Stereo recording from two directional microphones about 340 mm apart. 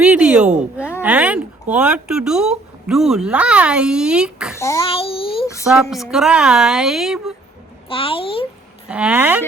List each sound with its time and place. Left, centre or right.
0.0 s speech: centre
0.8 s a sound: centre
1.0 s speech: centre
4.6 s a child's voice: centre
5.6 s speech: centre
7.9 s a child's voice: centre
8.9 s speech: centre